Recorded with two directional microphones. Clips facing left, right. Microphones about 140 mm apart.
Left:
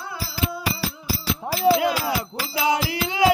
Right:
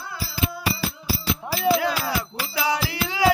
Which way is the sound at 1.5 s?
35° left (ahead or behind).